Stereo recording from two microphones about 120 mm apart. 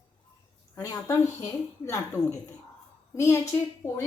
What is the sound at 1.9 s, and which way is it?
A woman's voice, 25° left (ahead or behind).